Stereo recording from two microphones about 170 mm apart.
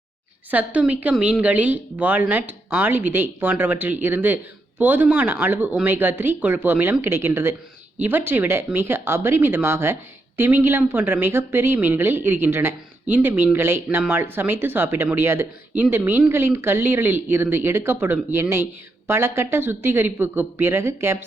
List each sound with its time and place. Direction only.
0.5 s speech: 10° right (ahead or behind)